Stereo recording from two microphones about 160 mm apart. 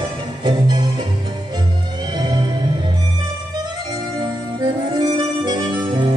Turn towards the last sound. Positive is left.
turn(degrees=-30)  # may be behind; listen again after turning